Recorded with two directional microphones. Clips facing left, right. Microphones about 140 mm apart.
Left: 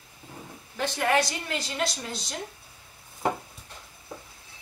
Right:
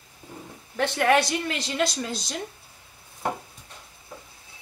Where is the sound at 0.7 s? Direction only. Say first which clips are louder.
Right 4 dB; 70° right (ahead or behind).